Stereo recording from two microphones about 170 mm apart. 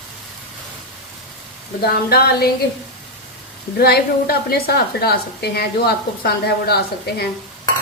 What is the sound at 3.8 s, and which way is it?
A woman's voice, 65° left (ahead or behind).